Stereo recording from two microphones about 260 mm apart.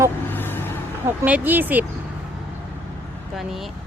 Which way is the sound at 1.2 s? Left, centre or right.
Centre.